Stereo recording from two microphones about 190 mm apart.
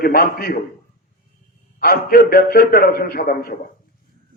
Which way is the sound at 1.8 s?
50° left (ahead or behind).